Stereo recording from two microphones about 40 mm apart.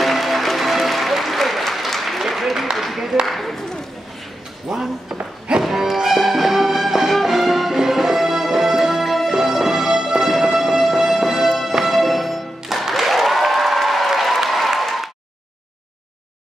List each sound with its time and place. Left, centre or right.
0.0 s applause: centre
2.8 s a sound: centre
4.6 s speech: centre
5.6 s music: centre
12.8 s applause: centre